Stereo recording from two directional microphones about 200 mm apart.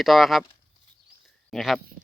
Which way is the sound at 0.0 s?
Centre (ahead or behind).